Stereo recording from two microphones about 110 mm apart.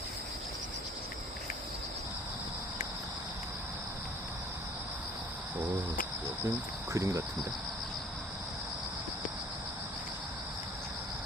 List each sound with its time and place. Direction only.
6.9 s speech: 30° right (ahead or behind)